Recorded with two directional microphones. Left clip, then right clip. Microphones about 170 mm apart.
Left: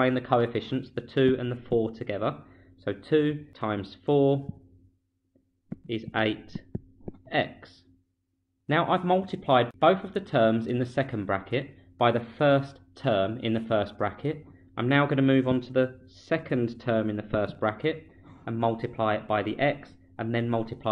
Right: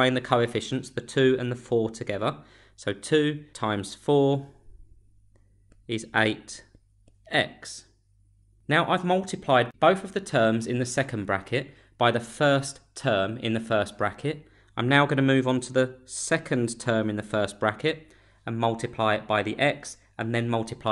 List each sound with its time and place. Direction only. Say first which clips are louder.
0.0 s speech: right 1 dB; 35° right (ahead or behind)
5.9 s speech: right 3 dB; 45° right (ahead or behind)
7.2 s speech: right 2 dB; 35° right (ahead or behind)
14.7 s speech: right 3 dB; 40° right (ahead or behind)